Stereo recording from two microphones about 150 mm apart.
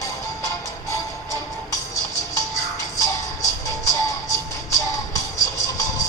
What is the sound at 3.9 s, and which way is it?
Music, 20° left (ahead or behind).